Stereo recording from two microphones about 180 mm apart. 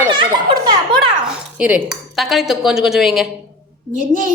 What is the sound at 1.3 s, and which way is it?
Speech, 5° right (ahead or behind).